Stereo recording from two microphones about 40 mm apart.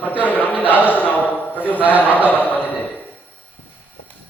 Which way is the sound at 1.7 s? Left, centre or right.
Right.